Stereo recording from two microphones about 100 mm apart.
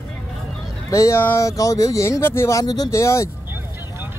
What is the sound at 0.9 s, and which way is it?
Speech, 30° left (ahead or behind).